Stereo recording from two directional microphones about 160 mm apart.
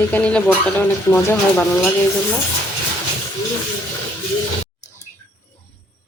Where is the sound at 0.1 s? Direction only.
10° left (ahead or behind).